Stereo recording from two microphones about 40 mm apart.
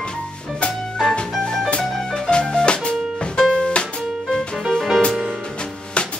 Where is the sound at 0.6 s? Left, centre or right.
Left.